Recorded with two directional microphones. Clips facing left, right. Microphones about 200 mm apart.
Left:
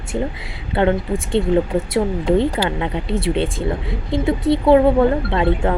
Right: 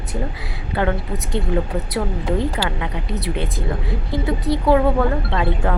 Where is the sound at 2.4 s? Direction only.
30° left (ahead or behind).